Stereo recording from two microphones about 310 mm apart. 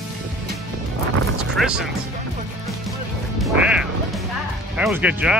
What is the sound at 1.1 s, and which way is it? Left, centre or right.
Music, right.